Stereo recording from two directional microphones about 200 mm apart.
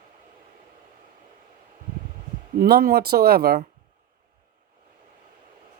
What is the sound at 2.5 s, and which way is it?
Speech, 50° right (ahead or behind).